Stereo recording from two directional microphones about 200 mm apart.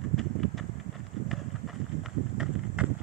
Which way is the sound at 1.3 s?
Centre (ahead or behind).